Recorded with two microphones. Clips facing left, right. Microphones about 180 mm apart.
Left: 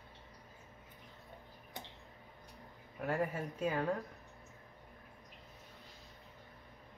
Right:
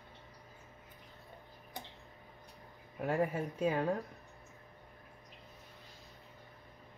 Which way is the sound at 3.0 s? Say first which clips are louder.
Right 3 dB; 20° right (ahead or behind).